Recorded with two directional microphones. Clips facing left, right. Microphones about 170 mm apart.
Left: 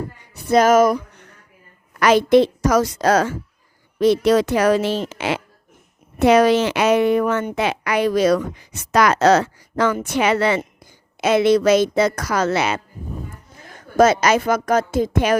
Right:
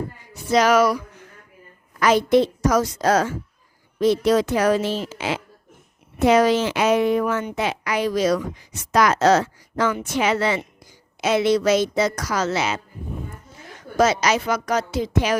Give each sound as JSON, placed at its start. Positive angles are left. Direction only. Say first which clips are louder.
{"t": 0.4, "sound": "a woman's voice", "louder": "left 3 dB", "side_deg": 50}
{"t": 2.0, "sound": "a woman's voice", "louder": "left 3 dB", "side_deg": 80}